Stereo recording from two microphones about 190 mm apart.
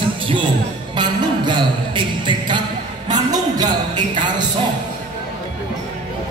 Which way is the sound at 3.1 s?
20° right (ahead or behind).